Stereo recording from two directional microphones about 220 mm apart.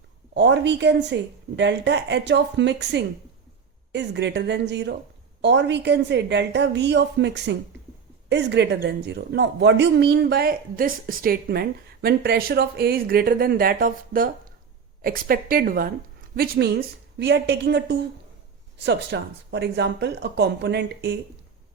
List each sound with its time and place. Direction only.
0.3 s a woman's voice: 50° right (ahead or behind)